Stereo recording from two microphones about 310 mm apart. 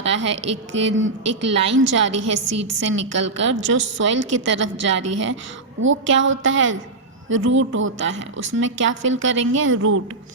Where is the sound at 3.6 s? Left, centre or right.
Right.